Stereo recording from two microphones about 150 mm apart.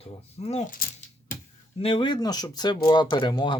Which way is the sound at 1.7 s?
40° left (ahead or behind).